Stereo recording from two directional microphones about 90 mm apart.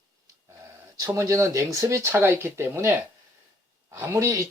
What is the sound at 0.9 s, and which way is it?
Speech, 40° right (ahead or behind).